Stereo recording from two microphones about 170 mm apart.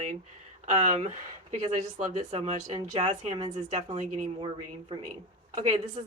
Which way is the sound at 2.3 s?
35° right (ahead or behind).